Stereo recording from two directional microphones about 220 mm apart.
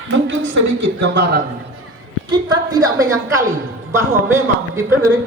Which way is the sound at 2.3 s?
20° right (ahead or behind).